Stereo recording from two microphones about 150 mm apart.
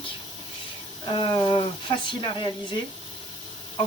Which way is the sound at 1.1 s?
35° left (ahead or behind).